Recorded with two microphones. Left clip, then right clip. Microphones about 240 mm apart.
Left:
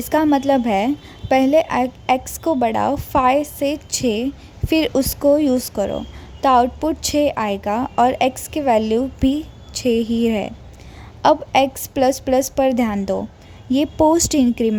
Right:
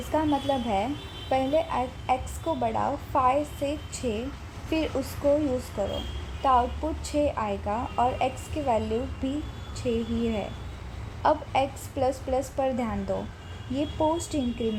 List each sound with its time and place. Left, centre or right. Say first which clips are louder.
0.1 s a woman's voice: left 10 dB; left